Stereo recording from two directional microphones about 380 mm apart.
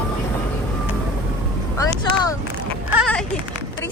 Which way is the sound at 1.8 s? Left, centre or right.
Centre.